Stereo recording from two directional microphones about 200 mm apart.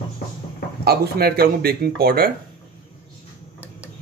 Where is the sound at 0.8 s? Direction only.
50° right (ahead or behind).